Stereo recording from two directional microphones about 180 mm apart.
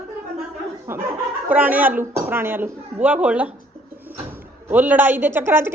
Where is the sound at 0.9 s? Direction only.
10° right (ahead or behind).